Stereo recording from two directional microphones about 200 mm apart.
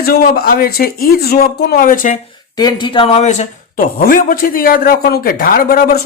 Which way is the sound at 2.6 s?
20° left (ahead or behind).